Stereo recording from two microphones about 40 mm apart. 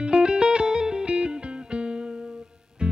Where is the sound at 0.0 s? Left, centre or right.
Right.